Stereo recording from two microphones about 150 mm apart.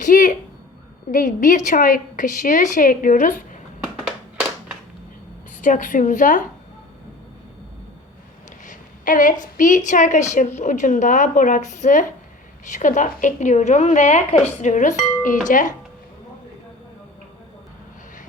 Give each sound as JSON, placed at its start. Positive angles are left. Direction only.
{"t": 0.0, "sound": "a sound", "side_deg": 60}
{"t": 1.1, "sound": "a woman's voice", "side_deg": 60}
{"t": 5.6, "sound": "a woman's voice", "side_deg": 60}
{"t": 8.6, "sound": "a woman's voice", "side_deg": 60}